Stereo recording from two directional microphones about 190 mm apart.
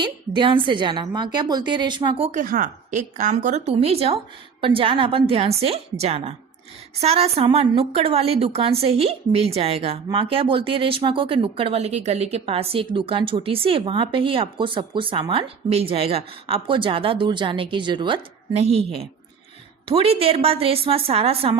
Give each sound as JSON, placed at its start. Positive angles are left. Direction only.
{"t": 0.0, "sound": "a woman's voice", "side_deg": -25}
{"t": 2.4, "sound": "a woman's voice", "side_deg": -45}